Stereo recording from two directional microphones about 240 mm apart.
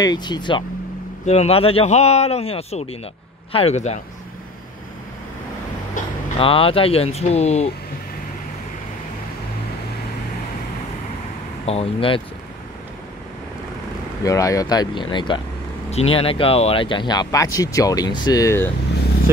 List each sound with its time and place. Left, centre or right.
0.0 s speech: centre
6.4 s speech: left
11.6 s speech: left
14.2 s speech: centre